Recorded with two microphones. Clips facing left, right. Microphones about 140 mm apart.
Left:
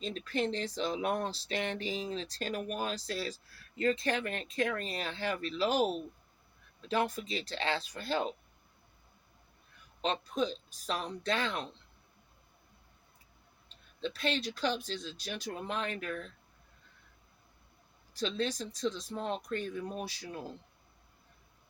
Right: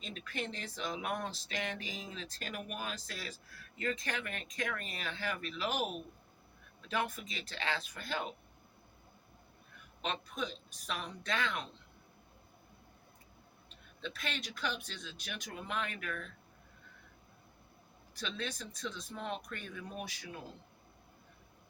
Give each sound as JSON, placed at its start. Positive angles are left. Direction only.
{"t": 0.0, "sound": "speech", "side_deg": 35}
{"t": 10.0, "sound": "speech", "side_deg": 35}
{"t": 14.0, "sound": "speech", "side_deg": 30}
{"t": 18.2, "sound": "speech", "side_deg": 30}